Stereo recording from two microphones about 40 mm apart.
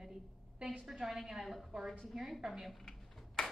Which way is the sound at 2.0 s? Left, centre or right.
Centre.